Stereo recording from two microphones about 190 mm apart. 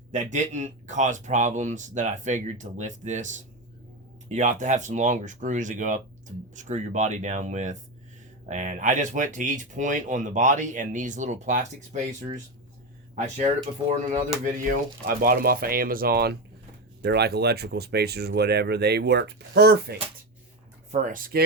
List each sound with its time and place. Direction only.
0.1 s speech: 40° right (ahead or behind)
13.1 s speech: 40° right (ahead or behind)
15.0 s speech: 50° right (ahead or behind)
20.9 s speech: 45° right (ahead or behind)